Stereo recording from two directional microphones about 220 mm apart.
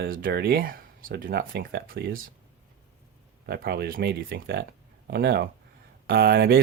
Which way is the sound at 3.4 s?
45° right (ahead or behind).